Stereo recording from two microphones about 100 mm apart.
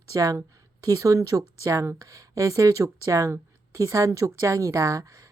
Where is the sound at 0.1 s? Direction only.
35° right (ahead or behind).